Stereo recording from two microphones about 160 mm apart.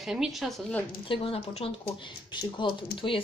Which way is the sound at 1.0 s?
35° left (ahead or behind).